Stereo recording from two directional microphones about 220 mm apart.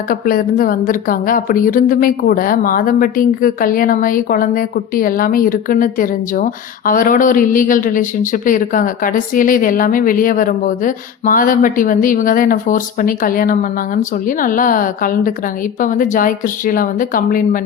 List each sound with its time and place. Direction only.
0.1 s a woman's voice: 40° left (ahead or behind)